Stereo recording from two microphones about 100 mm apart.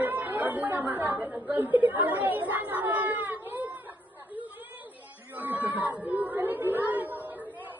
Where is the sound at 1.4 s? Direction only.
20° right (ahead or behind).